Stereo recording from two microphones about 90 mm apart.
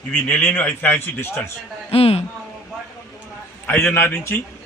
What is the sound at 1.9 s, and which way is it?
Speech, 90° left.